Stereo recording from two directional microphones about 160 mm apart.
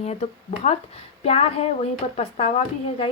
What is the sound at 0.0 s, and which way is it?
A woman's voice, 45° left (ahead or behind).